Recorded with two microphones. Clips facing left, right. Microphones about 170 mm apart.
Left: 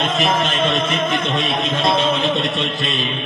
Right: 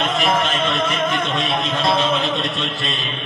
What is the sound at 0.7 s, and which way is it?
Music, 20° left (ahead or behind).